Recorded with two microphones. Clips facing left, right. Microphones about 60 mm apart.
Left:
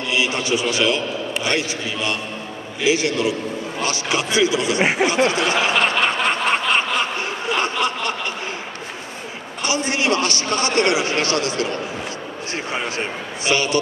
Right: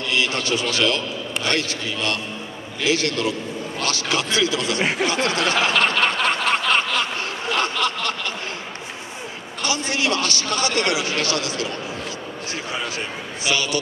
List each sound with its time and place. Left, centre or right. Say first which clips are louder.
0.1 s a man's voice: left 2 dB; centre
3.8 s a sound: left 1 dB; left
9.6 s a man's voice: left 2 dB; left